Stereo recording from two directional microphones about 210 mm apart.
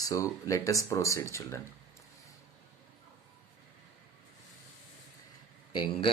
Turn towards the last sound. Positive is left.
turn(degrees=20)  # may be behind; listen again after turning